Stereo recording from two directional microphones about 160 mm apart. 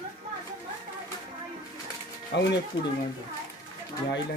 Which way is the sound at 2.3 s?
90° left.